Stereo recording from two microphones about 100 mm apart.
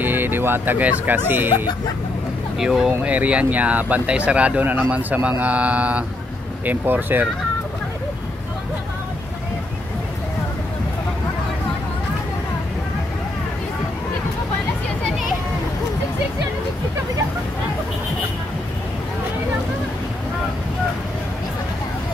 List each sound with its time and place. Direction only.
0.0 s speech: 20° right (ahead or behind)
2.6 s speech: 5° right (ahead or behind)